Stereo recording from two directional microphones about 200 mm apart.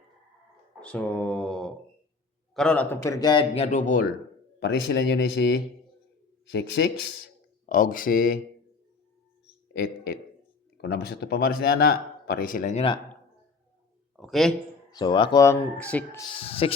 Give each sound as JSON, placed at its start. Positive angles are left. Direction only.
{"t": 0.8, "sound": "a man's voice", "side_deg": 5}
{"t": 4.6, "sound": "speech", "side_deg": 60}
{"t": 7.7, "sound": "speech", "side_deg": 45}
{"t": 10.8, "sound": "speech", "side_deg": 50}
{"t": 14.2, "sound": "a man's voice", "side_deg": 0}
{"t": 14.8, "sound": "a man's voice", "side_deg": 20}
{"t": 15.8, "sound": "speech", "side_deg": 5}
{"t": 16.3, "sound": "a man's voice", "side_deg": 30}